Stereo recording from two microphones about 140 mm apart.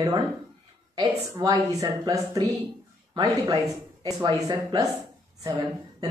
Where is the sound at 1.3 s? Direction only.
25° right (ahead or behind).